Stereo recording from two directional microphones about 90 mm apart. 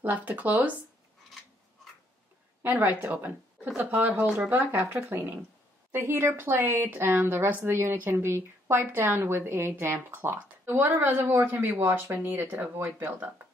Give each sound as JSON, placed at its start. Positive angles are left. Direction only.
{"t": 0.0, "sound": "speech", "side_deg": -20}
{"t": 2.6, "sound": "speech", "side_deg": -20}
{"t": 5.9, "sound": "speech", "side_deg": -25}